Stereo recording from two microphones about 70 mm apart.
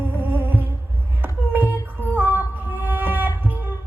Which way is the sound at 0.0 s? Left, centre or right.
Right.